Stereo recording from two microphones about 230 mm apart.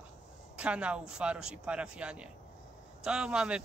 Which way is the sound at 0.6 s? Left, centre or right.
Centre.